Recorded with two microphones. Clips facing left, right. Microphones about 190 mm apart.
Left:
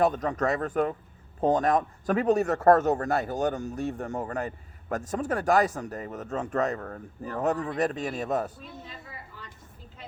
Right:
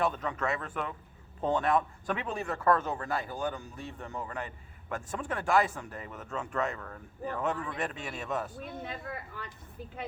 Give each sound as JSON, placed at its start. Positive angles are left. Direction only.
{"t": 0.0, "sound": "a man's voice", "side_deg": 40}
{"t": 8.6, "sound": "speech", "side_deg": -55}